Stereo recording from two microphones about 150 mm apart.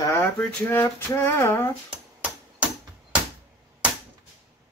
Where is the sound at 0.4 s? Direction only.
10° left (ahead or behind).